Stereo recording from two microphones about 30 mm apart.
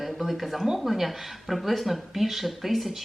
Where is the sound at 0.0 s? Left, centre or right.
Centre.